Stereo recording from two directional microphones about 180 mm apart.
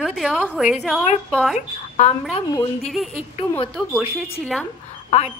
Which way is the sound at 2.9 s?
Centre (ahead or behind).